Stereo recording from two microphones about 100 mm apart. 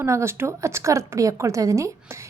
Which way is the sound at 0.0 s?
30° right (ahead or behind).